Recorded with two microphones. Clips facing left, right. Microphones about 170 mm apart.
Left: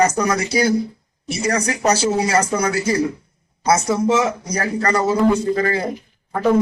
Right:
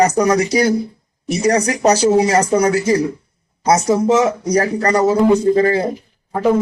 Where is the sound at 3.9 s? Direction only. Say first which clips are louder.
Right 4 dB; 35° right (ahead or behind).